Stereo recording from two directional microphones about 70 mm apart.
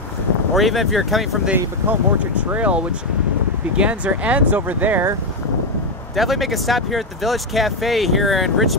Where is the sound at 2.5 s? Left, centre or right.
Centre.